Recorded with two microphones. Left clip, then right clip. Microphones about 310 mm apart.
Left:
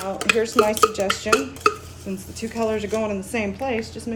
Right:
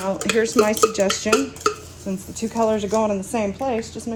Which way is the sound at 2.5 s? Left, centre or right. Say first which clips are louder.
Right 4 dB; centre.